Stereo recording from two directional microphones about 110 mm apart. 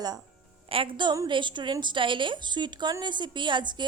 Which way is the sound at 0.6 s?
55° right (ahead or behind).